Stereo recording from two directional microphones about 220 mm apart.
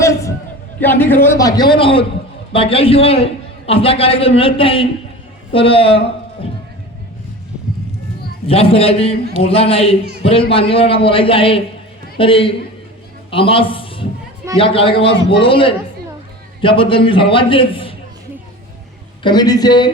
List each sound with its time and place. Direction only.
0.0 s a sound: 15° left (ahead or behind)
0.8 s a man's voice: 10° left (ahead or behind); by 6.0 s 25° left (ahead or behind)
8.4 s a man's voice: 25° left (ahead or behind)
19.2 s a man's voice: 20° left (ahead or behind)